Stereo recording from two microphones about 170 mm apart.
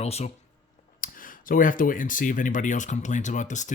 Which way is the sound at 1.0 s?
55° left (ahead or behind).